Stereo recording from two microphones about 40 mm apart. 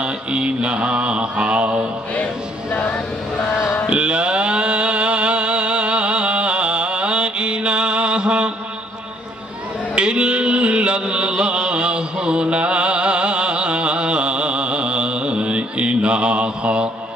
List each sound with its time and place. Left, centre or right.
0.0 s mantra: right
2.7 s vehicle: left
3.8 s a sound: right
9.9 s music: right